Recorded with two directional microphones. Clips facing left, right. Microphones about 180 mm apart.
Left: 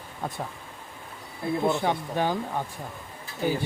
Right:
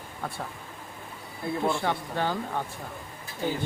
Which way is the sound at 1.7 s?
15° left (ahead or behind).